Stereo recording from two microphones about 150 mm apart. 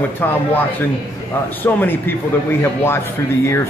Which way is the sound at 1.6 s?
15° left (ahead or behind).